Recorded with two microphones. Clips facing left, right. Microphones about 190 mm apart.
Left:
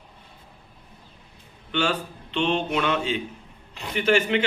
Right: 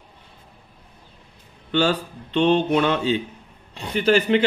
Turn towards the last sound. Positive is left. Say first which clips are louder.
# right 4 dB
turn(degrees=-35)  # may be behind; listen again after turning